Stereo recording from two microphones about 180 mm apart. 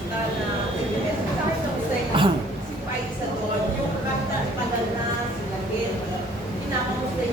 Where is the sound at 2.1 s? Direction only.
25° right (ahead or behind).